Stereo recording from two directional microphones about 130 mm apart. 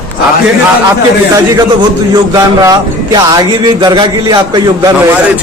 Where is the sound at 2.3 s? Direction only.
30° right (ahead or behind).